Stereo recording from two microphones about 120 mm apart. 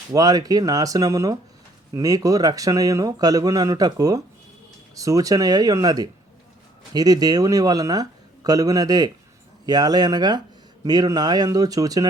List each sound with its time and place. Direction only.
0.1 s speech: 30° right (ahead or behind)